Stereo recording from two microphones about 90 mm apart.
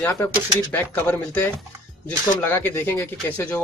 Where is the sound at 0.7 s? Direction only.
20° left (ahead or behind).